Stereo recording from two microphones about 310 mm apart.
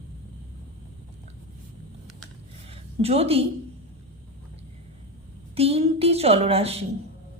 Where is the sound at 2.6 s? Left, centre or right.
Centre.